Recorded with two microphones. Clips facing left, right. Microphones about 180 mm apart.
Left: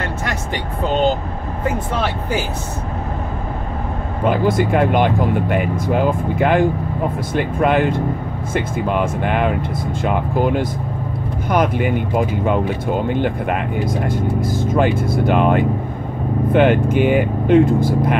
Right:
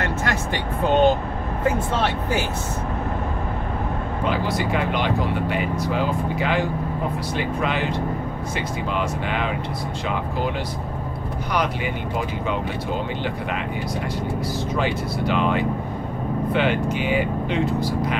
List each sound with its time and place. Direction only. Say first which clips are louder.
4.2 s speech: left 8 dB; 50° left (ahead or behind)